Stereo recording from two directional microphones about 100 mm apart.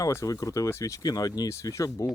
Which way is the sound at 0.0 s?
30° left (ahead or behind).